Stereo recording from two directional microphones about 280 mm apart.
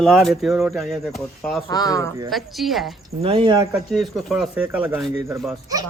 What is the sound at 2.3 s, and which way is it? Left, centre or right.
Speech, centre.